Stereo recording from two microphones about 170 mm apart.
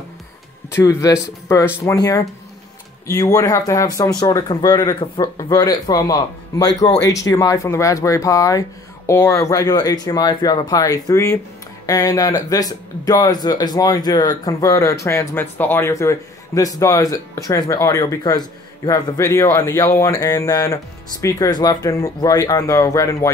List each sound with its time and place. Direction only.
0.7 s speech: 15° left (ahead or behind)